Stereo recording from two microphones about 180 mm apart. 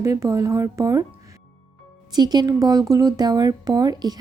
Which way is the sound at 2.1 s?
25° right (ahead or behind).